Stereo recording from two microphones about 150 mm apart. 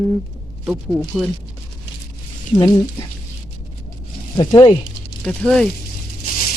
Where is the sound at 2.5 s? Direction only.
25° left (ahead or behind).